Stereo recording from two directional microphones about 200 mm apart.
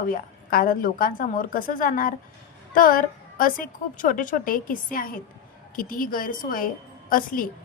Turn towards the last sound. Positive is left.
turn(degrees=45)  # may be behind; listen again after turning